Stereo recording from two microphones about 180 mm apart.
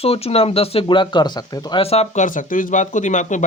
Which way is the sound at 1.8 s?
35° left (ahead or behind).